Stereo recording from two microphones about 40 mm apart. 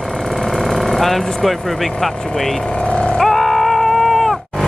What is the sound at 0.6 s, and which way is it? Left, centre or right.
Speech, centre.